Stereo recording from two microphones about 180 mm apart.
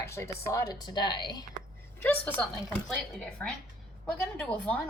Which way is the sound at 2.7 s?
5° left (ahead or behind).